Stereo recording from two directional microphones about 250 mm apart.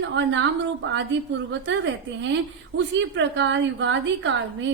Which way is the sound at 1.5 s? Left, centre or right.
Right.